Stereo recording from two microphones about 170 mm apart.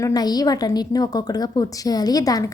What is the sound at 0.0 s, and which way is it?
A woman's voice, 25° left (ahead or behind).